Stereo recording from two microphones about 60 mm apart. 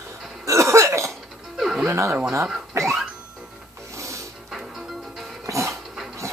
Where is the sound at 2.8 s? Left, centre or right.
Right.